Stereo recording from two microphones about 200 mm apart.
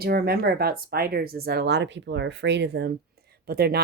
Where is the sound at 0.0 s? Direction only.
50° right (ahead or behind).